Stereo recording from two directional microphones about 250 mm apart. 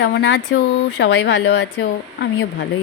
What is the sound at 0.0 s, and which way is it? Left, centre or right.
A woman's voice, left.